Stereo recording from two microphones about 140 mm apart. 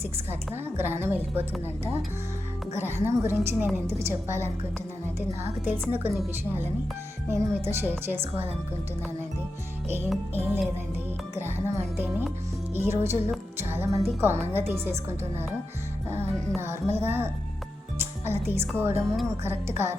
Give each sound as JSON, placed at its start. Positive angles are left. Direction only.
{"t": 0.0, "sound": "a woman's voice", "side_deg": -15}
{"t": 3.0, "sound": "a woman's voice", "side_deg": -20}
{"t": 7.3, "sound": "a woman's voice", "side_deg": -20}
{"t": 10.3, "sound": "a woman's voice", "side_deg": -15}
{"t": 16.6, "sound": "a woman's voice", "side_deg": -15}